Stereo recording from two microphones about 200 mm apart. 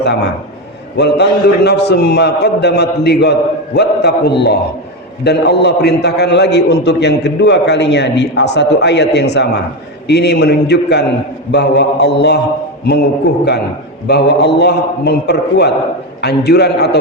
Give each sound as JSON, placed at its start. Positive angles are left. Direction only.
{"t": 0.0, "sound": "a man's voice", "side_deg": 55}